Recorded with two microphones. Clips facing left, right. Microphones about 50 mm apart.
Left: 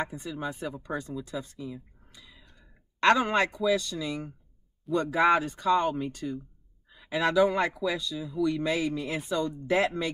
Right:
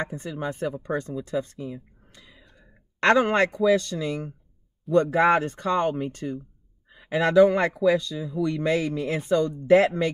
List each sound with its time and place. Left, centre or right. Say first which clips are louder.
0.1 s speech: right 4 dB; right